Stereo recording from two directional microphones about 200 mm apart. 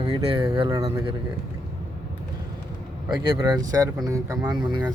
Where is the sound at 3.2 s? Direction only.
20° right (ahead or behind).